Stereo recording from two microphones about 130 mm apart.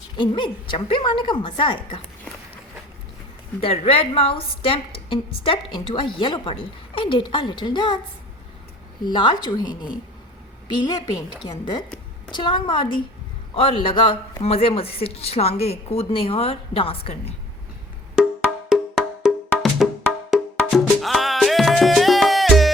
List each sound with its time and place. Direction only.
0.2 s a woman's voice: 40° left (ahead or behind)
3.6 s a woman's voice: 50° left (ahead or behind)
9.0 s a woman's voice: 35° left (ahead or behind)
18.7 s wood block: 5° right (ahead or behind)
20.3 s music: centre (ahead or behind)